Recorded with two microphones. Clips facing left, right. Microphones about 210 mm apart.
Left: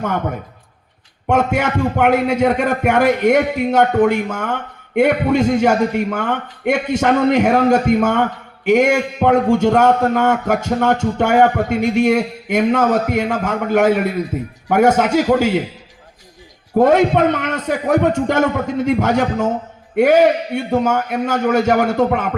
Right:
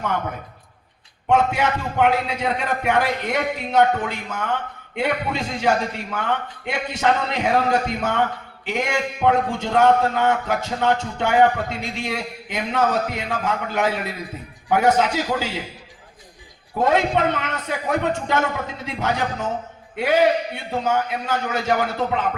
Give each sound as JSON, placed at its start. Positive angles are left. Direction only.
{"t": 1.3, "sound": "a man's voice", "side_deg": 50}
{"t": 16.7, "sound": "a man's voice", "side_deg": 50}